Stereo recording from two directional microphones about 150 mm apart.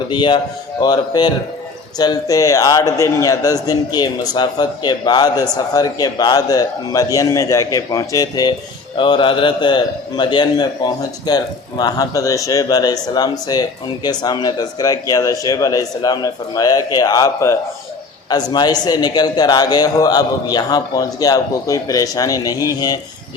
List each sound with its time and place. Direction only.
0.1 s a man's voice: 30° left (ahead or behind)